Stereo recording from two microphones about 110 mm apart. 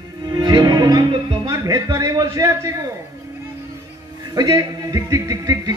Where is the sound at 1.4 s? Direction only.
30° right (ahead or behind).